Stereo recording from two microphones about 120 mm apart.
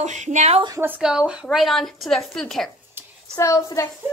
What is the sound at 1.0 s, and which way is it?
Speech, 5° right (ahead or behind).